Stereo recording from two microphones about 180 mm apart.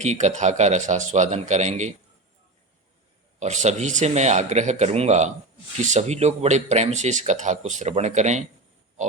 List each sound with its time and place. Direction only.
0.0 s speech: 40° right (ahead or behind)
3.4 s speech: 40° right (ahead or behind)